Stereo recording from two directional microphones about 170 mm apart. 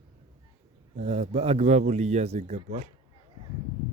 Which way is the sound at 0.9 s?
40° right (ahead or behind).